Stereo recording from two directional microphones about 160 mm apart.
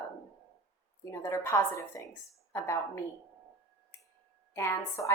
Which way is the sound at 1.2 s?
20° left (ahead or behind).